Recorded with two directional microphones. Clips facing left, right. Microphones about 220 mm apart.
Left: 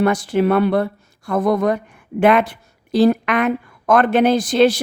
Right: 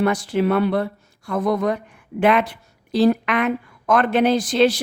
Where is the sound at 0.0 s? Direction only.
50° left (ahead or behind).